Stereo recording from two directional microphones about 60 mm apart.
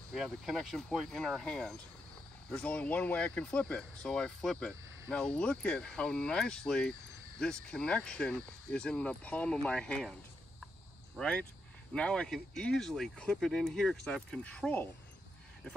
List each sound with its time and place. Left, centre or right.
0.1 s speech: centre
0.6 s speech: centre
2.5 s speech: centre
11.1 s speech: centre
14.4 s speech: left